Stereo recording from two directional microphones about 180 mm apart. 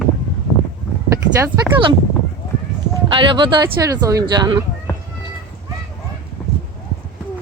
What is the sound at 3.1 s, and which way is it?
Speech, 25° right (ahead or behind).